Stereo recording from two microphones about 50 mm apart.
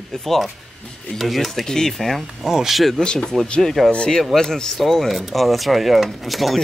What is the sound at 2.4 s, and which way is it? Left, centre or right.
Speech, centre.